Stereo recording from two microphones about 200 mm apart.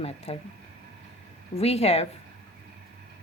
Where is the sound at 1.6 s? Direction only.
30° left (ahead or behind).